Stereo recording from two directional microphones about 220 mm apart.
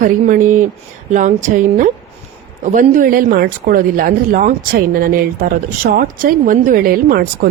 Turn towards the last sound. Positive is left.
turn(degrees=-40)  # may be behind; listen again after turning